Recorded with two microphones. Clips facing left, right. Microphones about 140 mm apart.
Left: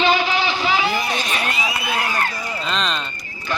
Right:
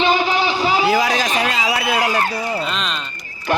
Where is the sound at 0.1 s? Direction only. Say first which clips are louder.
Right 2 dB; 45° right (ahead or behind).